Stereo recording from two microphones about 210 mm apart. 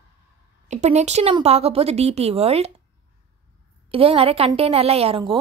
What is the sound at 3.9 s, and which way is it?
A woman's voice, 25° right (ahead or behind).